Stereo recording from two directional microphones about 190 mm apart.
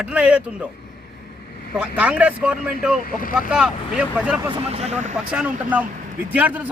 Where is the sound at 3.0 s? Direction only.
50° left (ahead or behind).